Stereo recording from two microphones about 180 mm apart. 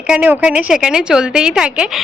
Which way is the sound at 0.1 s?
5° right (ahead or behind).